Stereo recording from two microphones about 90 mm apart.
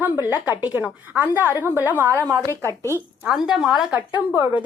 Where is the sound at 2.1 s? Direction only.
40° right (ahead or behind).